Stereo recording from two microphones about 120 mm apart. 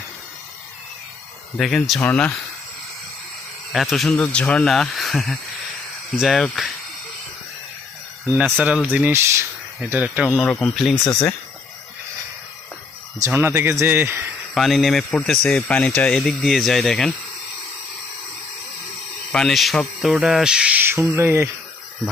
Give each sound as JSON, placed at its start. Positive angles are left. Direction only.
{"t": 1.5, "sound": "speech", "side_deg": 5}
{"t": 3.7, "sound": "speech", "side_deg": 0}
{"t": 8.6, "sound": "speech", "side_deg": -10}
{"t": 9.9, "sound": "speech", "side_deg": -10}
{"t": 10.2, "sound": "speech", "side_deg": 5}
{"t": 11.0, "sound": "speech", "side_deg": 25}
{"t": 13.5, "sound": "speech", "side_deg": -25}
{"t": 14.5, "sound": "speech", "side_deg": 0}
{"t": 19.3, "sound": "speech", "side_deg": 5}